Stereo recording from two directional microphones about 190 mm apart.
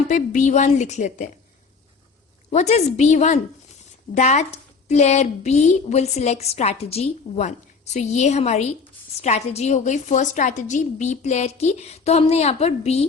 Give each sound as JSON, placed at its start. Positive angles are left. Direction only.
{"t": 0.1, "sound": "a woman's voice", "side_deg": 40}
{"t": 2.5, "sound": "a woman's voice", "side_deg": 35}